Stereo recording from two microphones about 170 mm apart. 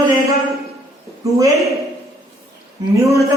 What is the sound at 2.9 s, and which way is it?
Speech, 20° right (ahead or behind).